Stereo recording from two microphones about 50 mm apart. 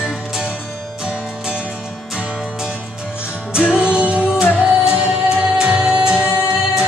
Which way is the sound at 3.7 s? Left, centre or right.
Centre.